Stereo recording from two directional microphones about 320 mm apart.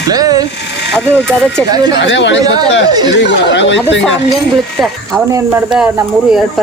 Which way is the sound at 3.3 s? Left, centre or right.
Left.